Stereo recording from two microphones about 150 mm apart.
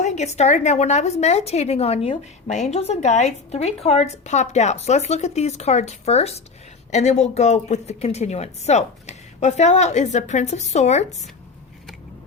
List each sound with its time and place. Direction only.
0.0 s speech: 50° left (ahead or behind)